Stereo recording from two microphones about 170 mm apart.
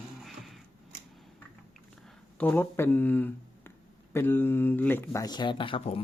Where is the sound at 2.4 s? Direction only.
15° left (ahead or behind).